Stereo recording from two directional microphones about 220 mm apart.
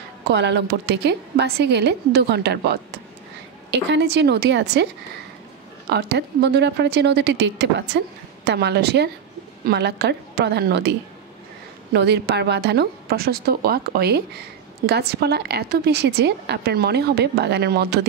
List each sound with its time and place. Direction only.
0.3 s a woman's voice: 50° right (ahead or behind)
3.9 s a woman's voice: 50° right (ahead or behind)
5.9 s a woman's voice: 50° right (ahead or behind)